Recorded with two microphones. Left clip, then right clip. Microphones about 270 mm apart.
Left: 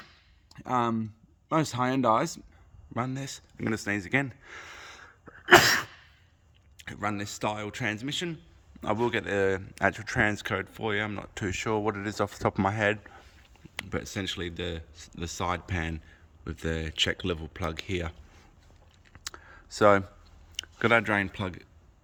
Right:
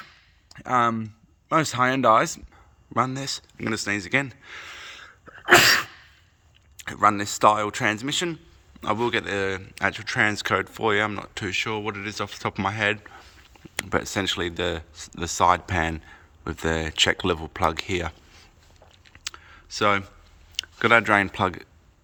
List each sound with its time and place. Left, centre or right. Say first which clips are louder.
0.4 s speech: right 6 dB; centre
19.0 s clicking: right 5 dB; centre
20.6 s speech: right 5 dB; centre